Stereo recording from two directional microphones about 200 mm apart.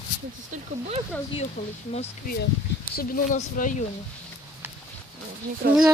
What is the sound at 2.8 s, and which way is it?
Speech, 45° left (ahead or behind).